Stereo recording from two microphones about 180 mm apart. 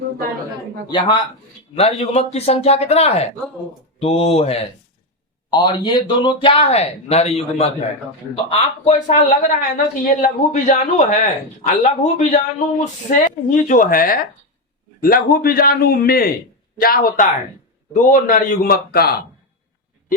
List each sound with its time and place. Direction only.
0.9 s a man's voice: 25° left (ahead or behind); by 19.1 s 60° left (ahead or behind)